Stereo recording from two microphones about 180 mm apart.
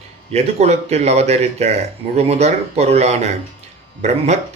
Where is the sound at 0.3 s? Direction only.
35° right (ahead or behind).